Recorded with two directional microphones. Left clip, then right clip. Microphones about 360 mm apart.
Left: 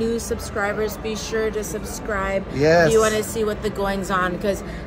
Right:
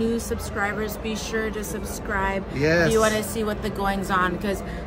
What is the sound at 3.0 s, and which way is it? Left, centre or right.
A woman's voice, centre.